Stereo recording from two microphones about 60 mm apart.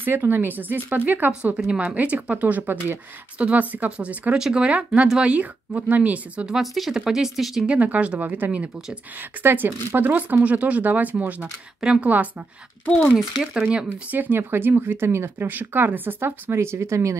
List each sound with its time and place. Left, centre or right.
0.0 s speech: right
5.0 s speech: centre
5.3 s speech: right
6.4 s speech: centre
7.6 s speech: right
9.4 s speech: right; by 12.1 s centre
12.8 s speech: left
13.4 s speech: centre
13.8 s speech: right